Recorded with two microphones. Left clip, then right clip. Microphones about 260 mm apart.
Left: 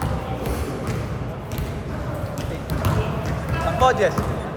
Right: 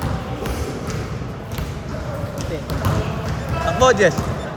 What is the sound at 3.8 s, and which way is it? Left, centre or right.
Basketball bounce, right.